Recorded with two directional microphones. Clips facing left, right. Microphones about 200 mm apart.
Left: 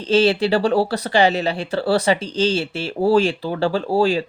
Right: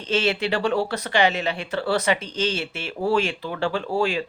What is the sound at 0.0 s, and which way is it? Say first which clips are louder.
Speech: left 7 dB; 35° left (ahead or behind).